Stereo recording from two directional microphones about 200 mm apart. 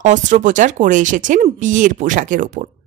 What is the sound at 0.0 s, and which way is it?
A woman's voice, 40° right (ahead or behind).